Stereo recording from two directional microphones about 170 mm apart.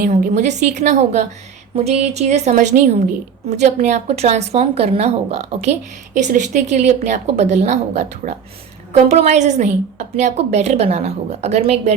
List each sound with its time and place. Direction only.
0.0 s a woman's voice: 50° right (ahead or behind)